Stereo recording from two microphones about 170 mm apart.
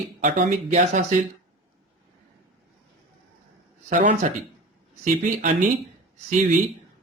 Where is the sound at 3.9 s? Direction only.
45° right (ahead or behind).